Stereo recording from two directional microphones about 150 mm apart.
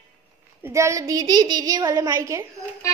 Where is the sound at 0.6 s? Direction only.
20° right (ahead or behind).